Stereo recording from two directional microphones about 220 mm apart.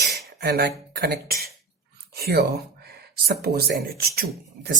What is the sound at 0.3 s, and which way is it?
Speech, 45° right (ahead or behind).